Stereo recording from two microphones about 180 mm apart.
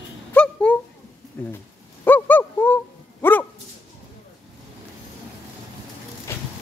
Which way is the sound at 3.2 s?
10° left (ahead or behind).